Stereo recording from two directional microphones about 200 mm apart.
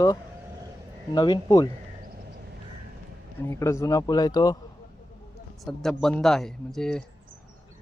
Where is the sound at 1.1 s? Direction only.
20° left (ahead or behind).